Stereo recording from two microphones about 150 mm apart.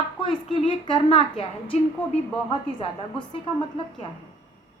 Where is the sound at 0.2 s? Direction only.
35° left (ahead or behind).